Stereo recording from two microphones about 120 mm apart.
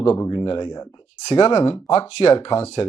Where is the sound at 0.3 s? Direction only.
40° left (ahead or behind).